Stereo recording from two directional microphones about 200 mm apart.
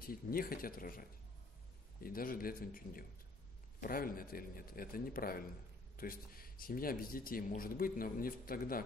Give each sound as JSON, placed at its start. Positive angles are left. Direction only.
{"t": 0.0, "sound": "speech", "side_deg": 45}